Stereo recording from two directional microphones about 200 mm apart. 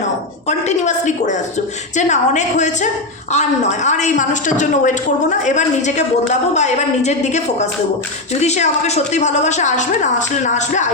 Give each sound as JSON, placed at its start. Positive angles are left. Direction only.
{"t": 0.4, "sound": "a woman's voice", "side_deg": 35}